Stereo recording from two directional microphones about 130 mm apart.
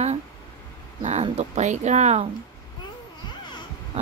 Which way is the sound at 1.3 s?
60° right (ahead or behind).